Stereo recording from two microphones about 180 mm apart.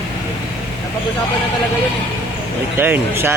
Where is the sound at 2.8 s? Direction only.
10° right (ahead or behind).